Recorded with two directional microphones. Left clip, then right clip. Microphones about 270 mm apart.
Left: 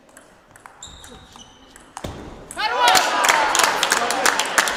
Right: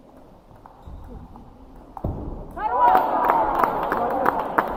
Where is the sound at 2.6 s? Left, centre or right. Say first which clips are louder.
Left 1 dB; left.